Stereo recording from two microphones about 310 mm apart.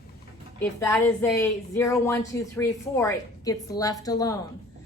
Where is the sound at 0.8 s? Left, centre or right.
Centre.